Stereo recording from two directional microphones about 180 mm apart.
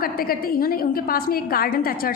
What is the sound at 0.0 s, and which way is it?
A woman's voice, 55° left (ahead or behind).